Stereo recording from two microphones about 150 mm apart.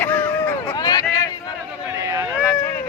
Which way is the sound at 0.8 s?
25° left (ahead or behind).